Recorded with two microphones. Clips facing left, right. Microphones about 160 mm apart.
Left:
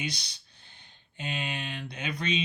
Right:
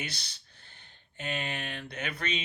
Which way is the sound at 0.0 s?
15° left (ahead or behind).